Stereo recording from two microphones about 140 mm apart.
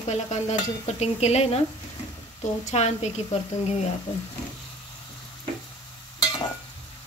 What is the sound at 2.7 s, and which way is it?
Speech, 50° left (ahead or behind).